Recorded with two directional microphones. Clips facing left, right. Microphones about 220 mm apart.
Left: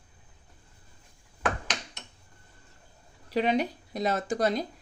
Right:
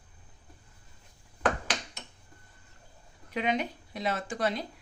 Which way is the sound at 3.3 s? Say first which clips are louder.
Left 4 dB; 35° left (ahead or behind).